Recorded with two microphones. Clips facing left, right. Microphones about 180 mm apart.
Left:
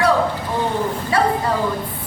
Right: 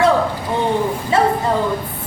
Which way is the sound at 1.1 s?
25° right (ahead or behind).